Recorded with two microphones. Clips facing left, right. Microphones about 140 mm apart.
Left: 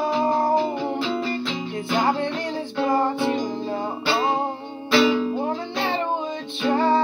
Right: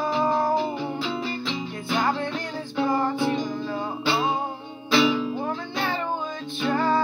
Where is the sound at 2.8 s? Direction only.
60° left (ahead or behind).